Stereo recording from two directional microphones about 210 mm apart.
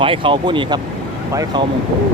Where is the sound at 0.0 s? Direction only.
25° right (ahead or behind).